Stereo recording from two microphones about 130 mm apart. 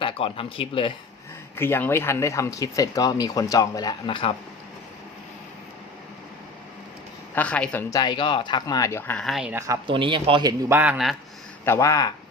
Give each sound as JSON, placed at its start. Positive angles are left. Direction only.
{"t": 0.0, "sound": "speech", "side_deg": 45}
{"t": 1.5, "sound": "speech", "side_deg": 15}
{"t": 7.3, "sound": "speech", "side_deg": 10}
{"t": 7.9, "sound": "speech", "side_deg": 30}
{"t": 9.1, "sound": "speech", "side_deg": 0}
{"t": 9.5, "sound": "speech", "side_deg": -20}
{"t": 9.8, "sound": "a man's voice", "side_deg": -40}
{"t": 10.7, "sound": "speech", "side_deg": -15}
{"t": 10.9, "sound": "speech", "side_deg": 0}
{"t": 11.6, "sound": "speech", "side_deg": 20}